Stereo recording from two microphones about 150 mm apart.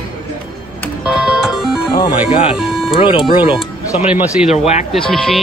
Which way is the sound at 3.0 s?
35° left (ahead or behind).